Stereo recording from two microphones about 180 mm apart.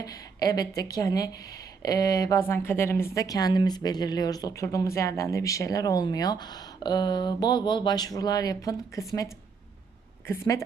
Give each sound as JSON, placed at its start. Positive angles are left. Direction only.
{"t": 0.0, "sound": "speech", "side_deg": 20}
{"t": 10.2, "sound": "a woman's voice", "side_deg": 15}